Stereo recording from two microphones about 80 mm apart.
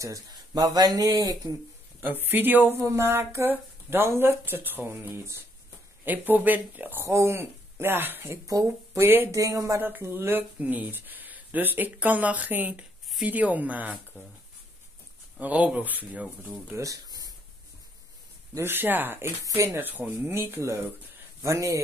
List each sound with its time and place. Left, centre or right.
0.3 s speech: right
2.0 s speech: right
6.0 s speech: right
7.0 s speech: right
9.3 s speech: right
9.8 s speech: right
15.3 s speech: centre
16.7 s speech: right
18.6 s speech: right
19.2 s speech: right
19.8 s speech: right